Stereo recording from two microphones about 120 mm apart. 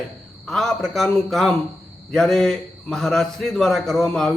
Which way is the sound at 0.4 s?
5° left (ahead or behind).